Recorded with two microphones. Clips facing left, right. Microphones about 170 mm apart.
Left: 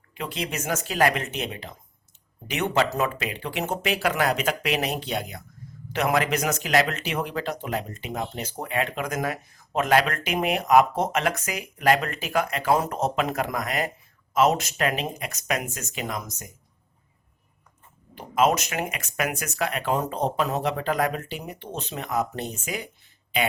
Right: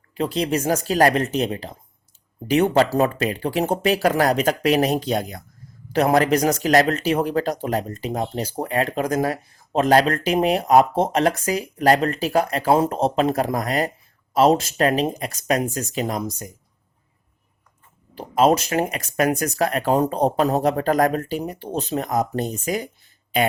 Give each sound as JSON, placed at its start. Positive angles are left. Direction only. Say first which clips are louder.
{"t": 0.1, "sound": "speech", "louder": "right 9 dB", "side_deg": -35}
{"t": 18.1, "sound": "speech", "louder": "right 5 dB", "side_deg": -35}